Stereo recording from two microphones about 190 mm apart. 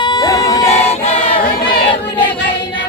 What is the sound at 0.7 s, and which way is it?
Choir, 35° left (ahead or behind).